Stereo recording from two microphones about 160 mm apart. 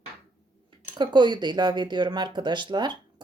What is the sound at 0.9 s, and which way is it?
Speech, 30° right (ahead or behind).